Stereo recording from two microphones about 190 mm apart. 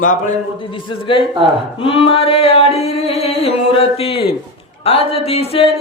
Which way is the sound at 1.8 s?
30° left (ahead or behind).